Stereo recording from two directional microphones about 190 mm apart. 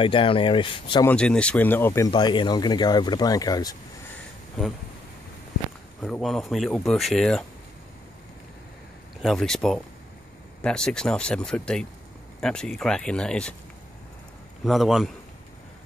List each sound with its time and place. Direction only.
0.0 s speech: 25° left (ahead or behind)
1.0 s speech: 5° left (ahead or behind)
2.0 s speech: 25° left (ahead or behind)
6.0 s speech: centre (ahead or behind)
9.2 s speech: centre (ahead or behind)
14.6 s speech: centre (ahead or behind)